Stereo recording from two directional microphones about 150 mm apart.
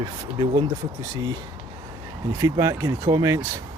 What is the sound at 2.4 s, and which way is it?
Speech, 20° right (ahead or behind).